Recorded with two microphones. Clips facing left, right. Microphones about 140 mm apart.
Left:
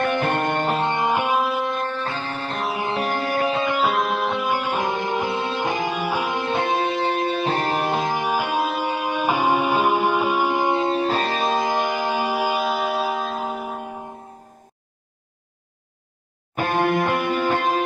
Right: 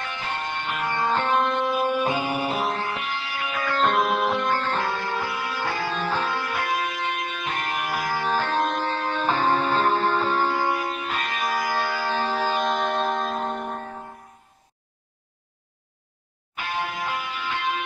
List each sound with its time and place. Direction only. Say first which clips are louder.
0.0 s music: left 10 dB; 55° left (ahead or behind)
0.7 s music: left 6 dB; 30° left (ahead or behind)
0.9 s music: left 2 dB; 15° left (ahead or behind); by 2.6 s 10° right (ahead or behind)
3.0 s music: left 9 dB; 45° left (ahead or behind)
3.7 s music: left 1 dB; 5° left (ahead or behind)
4.5 s music: left 2 dB; 10° left (ahead or behind)
16.5 s music: left 9 dB; 50° left (ahead or behind)